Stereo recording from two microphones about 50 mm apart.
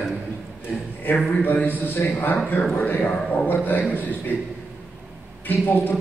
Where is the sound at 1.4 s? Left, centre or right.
Left.